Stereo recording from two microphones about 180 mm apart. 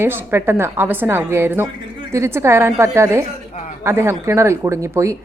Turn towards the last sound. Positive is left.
turn(degrees=-15)  # may be behind; listen again after turning